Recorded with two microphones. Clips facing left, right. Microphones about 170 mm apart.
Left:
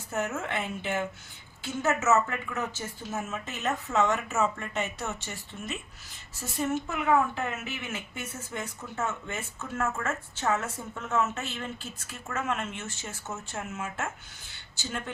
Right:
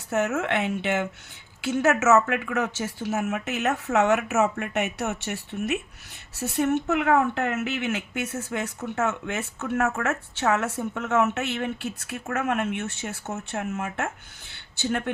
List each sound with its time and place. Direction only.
0.1 s speech: 75° right (ahead or behind)